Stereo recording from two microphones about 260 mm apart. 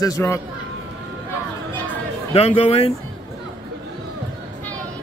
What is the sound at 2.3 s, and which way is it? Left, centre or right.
Speech, left.